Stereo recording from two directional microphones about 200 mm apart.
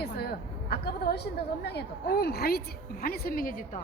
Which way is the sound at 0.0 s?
50° left (ahead or behind).